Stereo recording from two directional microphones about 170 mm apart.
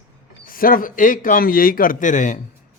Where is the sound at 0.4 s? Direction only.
55° left (ahead or behind).